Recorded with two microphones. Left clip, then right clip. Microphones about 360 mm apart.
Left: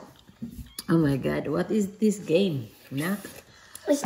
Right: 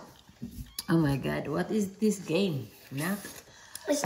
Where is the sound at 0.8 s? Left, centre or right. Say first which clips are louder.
Left 4 dB; centre.